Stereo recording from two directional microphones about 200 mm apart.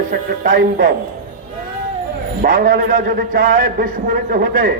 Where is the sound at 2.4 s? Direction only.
45° right (ahead or behind).